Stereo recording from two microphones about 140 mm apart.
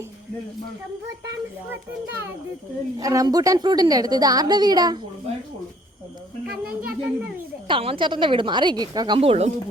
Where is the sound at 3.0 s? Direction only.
25° right (ahead or behind).